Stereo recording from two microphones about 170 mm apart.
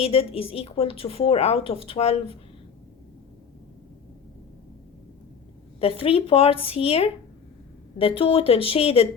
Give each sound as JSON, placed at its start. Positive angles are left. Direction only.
{"t": 0.0, "sound": "a woman's voice", "side_deg": 35}
{"t": 5.8, "sound": "a woman's voice", "side_deg": 35}